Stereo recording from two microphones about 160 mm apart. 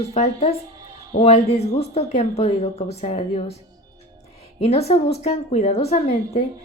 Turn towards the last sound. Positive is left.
turn(degrees=45)  # may be behind; listen again after turning